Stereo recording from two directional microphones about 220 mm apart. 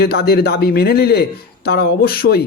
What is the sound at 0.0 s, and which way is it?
Speech, 45° left (ahead or behind).